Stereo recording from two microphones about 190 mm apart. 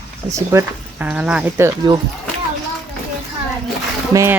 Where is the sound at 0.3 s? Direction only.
15° right (ahead or behind).